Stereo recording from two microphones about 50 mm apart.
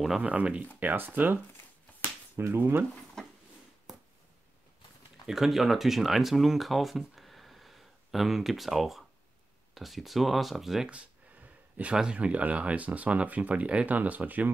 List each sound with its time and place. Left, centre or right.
0.2 s speech: right
0.7 s speech: right
3.2 s a sound: centre
5.2 s speech: centre
10.9 s a sound: right
11.9 s speech: centre